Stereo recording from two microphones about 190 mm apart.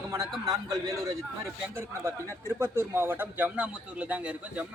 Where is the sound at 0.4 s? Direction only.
20° right (ahead or behind).